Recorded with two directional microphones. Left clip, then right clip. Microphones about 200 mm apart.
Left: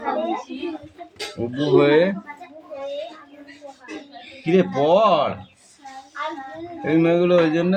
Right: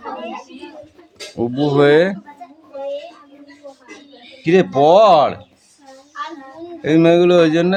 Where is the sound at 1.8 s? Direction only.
35° right (ahead or behind).